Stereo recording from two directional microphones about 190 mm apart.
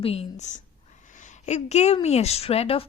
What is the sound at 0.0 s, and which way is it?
A woman's voice, 30° left (ahead or behind).